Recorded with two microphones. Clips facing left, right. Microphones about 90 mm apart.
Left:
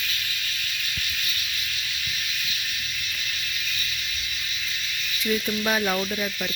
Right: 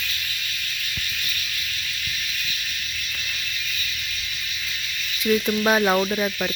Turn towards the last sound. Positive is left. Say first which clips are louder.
# right 5 dB
turn(degrees=-45)  # may be behind; listen again after turning